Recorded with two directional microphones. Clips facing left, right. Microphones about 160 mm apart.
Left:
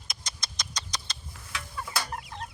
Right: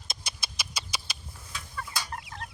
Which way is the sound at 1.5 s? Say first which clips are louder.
Left 3 dB; 65° left (ahead or behind).